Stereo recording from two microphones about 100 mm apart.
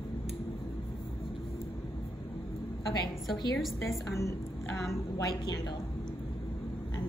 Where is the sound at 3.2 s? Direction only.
Centre (ahead or behind).